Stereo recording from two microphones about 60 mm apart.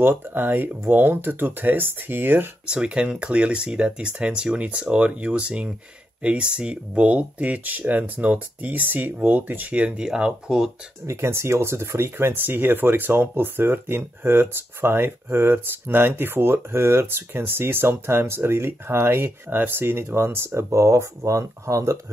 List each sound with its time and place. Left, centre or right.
0.0 s speech: right
2.6 s speech: centre
11.1 s speech: right